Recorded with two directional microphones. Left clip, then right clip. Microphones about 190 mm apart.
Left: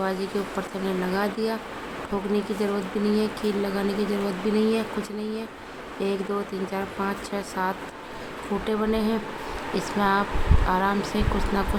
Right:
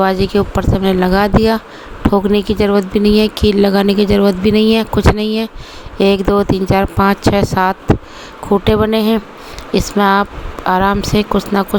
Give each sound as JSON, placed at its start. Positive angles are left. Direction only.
{"t": 0.0, "sound": "speech", "side_deg": -45}